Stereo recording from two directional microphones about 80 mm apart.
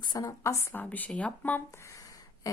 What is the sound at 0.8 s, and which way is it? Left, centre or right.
Speech, left.